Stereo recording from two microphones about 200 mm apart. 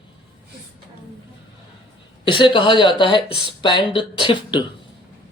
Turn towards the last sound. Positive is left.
turn(degrees=25)  # may be behind; listen again after turning